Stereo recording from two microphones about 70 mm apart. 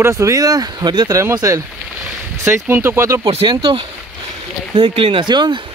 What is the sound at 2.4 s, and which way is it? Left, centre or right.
Speech, right.